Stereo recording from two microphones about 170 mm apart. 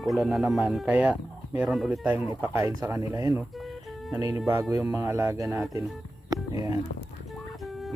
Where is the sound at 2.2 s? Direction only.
15° right (ahead or behind).